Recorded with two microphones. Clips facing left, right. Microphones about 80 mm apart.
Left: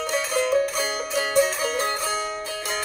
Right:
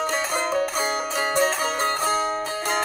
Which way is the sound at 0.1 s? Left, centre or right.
Right.